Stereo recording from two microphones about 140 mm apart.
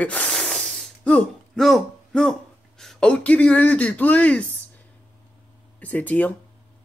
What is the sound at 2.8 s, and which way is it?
Speech, 5° left (ahead or behind).